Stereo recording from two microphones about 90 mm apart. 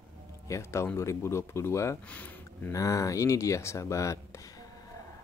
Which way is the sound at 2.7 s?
40° left (ahead or behind).